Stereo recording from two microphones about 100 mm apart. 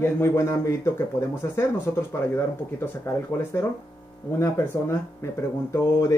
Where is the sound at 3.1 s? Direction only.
25° left (ahead or behind).